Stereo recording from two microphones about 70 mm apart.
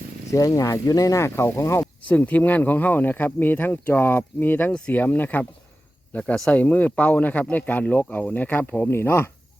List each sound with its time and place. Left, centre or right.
0.3 s speech: left
2.0 s speech: left
6.5 s speech: left